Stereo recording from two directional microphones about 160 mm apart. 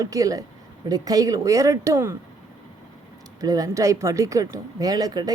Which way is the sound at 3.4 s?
20° right (ahead or behind).